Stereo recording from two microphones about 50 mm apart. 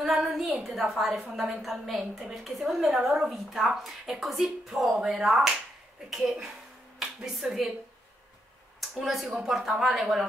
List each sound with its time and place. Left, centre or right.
0.0 s a woman's voice: centre
7.4 s speech: centre
8.9 s a woman's voice: centre